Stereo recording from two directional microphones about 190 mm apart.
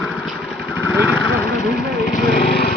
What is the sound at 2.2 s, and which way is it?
Lawn mower, 50° left (ahead or behind).